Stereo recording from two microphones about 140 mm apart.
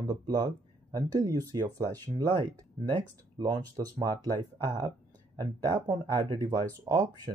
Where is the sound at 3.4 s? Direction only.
25° right (ahead or behind).